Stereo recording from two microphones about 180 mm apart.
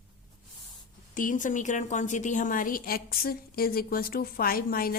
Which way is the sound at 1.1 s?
45° left (ahead or behind).